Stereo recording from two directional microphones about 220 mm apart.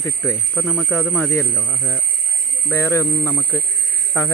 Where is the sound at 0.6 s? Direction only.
10° left (ahead or behind).